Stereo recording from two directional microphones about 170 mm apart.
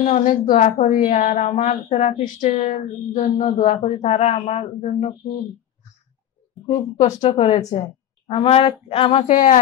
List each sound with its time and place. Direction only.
0.0 s a woman's voice: 45° left (ahead or behind)
7.2 s speech: 35° left (ahead or behind)
9.3 s a woman's voice: 50° left (ahead or behind)